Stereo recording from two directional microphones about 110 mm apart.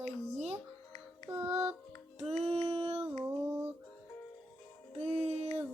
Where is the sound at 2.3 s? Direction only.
75° right (ahead or behind).